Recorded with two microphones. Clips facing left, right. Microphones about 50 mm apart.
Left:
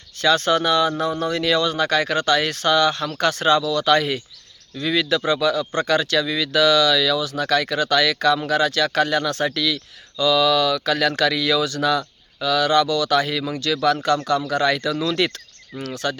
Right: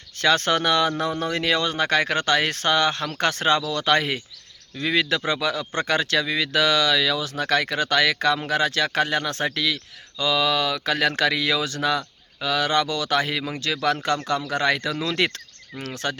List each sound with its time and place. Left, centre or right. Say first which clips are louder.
0.2 s speech: left 2 dB; right